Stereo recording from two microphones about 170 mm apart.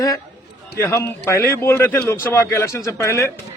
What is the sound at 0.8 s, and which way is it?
A man's voice, 15° left (ahead or behind).